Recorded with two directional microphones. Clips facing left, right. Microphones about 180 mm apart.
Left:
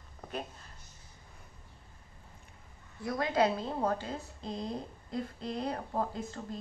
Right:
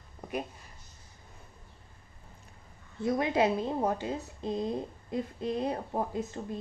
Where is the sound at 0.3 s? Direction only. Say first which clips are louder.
Right 4 dB; 10° right (ahead or behind).